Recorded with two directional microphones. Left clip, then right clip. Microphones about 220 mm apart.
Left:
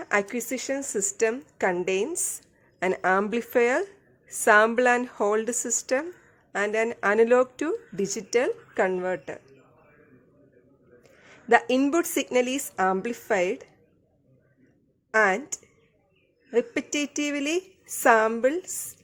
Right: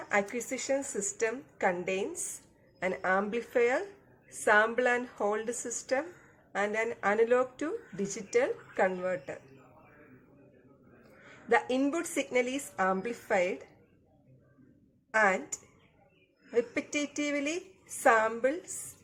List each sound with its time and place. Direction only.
0.1 s speech: 50° left (ahead or behind)
11.4 s speech: 45° left (ahead or behind)
15.1 s speech: 45° left (ahead or behind)